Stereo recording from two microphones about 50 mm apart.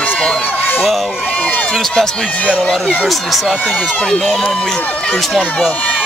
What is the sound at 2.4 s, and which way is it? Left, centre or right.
Speech, left.